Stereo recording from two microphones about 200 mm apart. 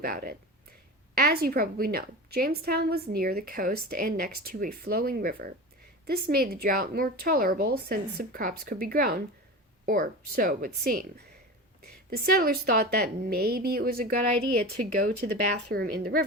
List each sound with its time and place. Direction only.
0.0 s a woman's voice: 45° right (ahead or behind)
15.7 s a woman's voice: 50° right (ahead or behind)